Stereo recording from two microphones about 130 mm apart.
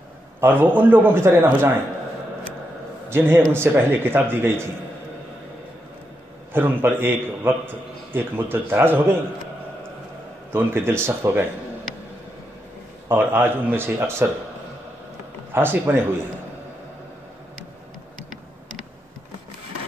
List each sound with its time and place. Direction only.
0.4 s a man's voice: 15° right (ahead or behind)
3.1 s a man's voice: 20° right (ahead or behind)
6.5 s a man's voice: 15° right (ahead or behind)
10.5 s speech: 20° right (ahead or behind)
13.1 s a man's voice: 15° right (ahead or behind)
15.5 s a man's voice: 15° right (ahead or behind)